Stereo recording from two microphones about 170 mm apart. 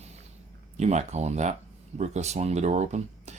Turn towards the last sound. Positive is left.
turn(degrees=-40)  # may be behind; listen again after turning